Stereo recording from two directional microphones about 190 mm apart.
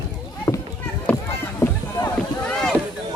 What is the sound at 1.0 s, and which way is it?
Run, 15° left (ahead or behind).